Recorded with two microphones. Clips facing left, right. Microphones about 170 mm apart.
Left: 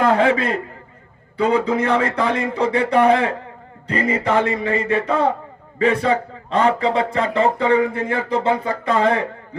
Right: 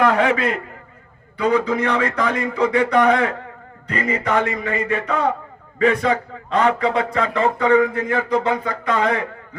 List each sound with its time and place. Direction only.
0.0 s a man's voice: 30° left (ahead or behind)